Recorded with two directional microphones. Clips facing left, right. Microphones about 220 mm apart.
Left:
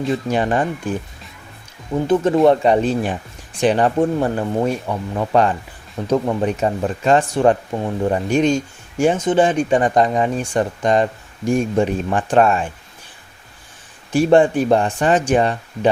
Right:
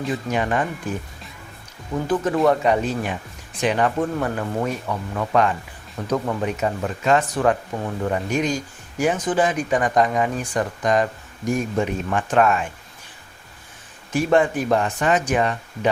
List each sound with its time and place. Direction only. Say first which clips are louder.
0.1 s speech: left 4 dB; 30° left (ahead or behind)
2.0 s speech: left 5 dB; 25° left (ahead or behind)
14.1 s speech: left 5 dB; 30° left (ahead or behind)